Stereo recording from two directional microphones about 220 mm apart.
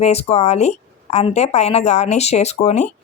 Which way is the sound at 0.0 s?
30° left (ahead or behind).